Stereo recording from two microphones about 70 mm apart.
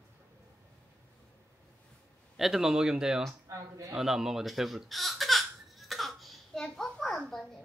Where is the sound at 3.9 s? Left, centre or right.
Centre.